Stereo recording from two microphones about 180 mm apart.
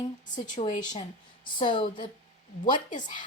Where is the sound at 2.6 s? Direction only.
45° left (ahead or behind).